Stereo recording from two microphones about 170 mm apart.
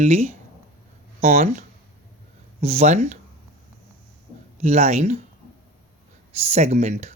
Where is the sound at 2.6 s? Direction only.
40° right (ahead or behind).